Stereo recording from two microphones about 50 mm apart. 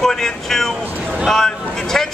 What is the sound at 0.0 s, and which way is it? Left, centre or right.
Speech, centre.